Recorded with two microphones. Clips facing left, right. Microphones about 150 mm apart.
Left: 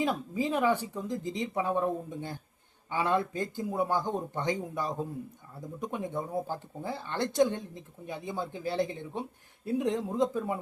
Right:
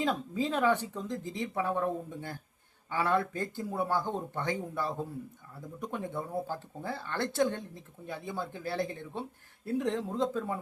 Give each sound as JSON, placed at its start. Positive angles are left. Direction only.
{"t": 0.0, "sound": "speech", "side_deg": 10}